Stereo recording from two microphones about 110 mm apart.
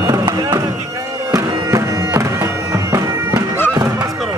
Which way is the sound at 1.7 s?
30° right (ahead or behind).